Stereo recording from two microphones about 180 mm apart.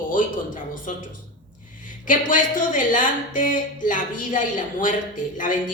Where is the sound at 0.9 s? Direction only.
45° left (ahead or behind).